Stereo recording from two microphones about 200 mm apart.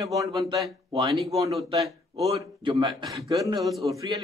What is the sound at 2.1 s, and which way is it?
A man's voice, 30° right (ahead or behind).